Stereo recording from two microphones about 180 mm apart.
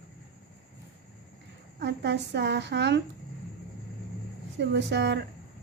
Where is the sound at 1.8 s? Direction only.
75° right (ahead or behind).